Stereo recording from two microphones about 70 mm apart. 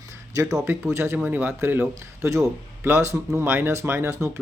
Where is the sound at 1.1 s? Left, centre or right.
Right.